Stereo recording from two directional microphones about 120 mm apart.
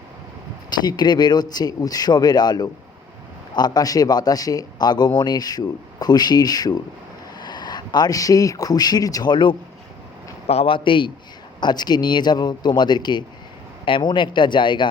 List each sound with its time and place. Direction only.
0.7 s speech: 35° left (ahead or behind)
10.4 s a man's voice: 55° left (ahead or behind); by 14.8 s 40° left (ahead or behind)